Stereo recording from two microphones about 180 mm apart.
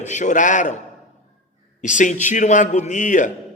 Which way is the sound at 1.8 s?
45° left (ahead or behind).